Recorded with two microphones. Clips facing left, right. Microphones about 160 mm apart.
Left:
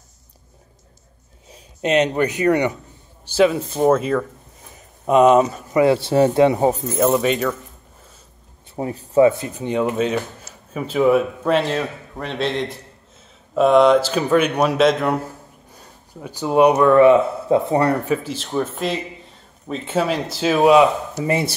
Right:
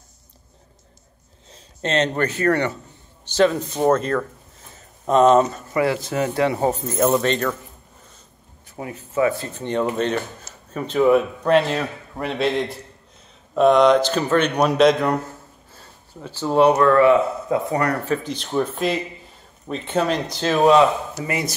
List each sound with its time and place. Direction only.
1.5 s a man's voice: 10° left (ahead or behind)
6.9 s a man's voice: centre (ahead or behind)
8.7 s speech: 35° left (ahead or behind)
9.3 s a man's voice: 15° left (ahead or behind)
18.0 s a man's voice: 5° left (ahead or behind)
21.2 s speech: 25° left (ahead or behind)